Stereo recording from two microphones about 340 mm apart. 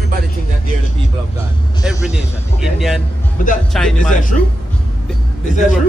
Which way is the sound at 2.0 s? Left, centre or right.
Centre.